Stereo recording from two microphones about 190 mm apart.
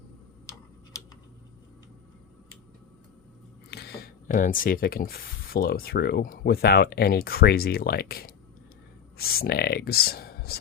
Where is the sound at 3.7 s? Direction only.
50° left (ahead or behind).